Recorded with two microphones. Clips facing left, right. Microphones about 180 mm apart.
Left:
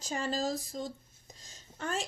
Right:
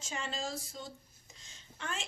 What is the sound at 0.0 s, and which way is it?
Speech, 40° left (ahead or behind).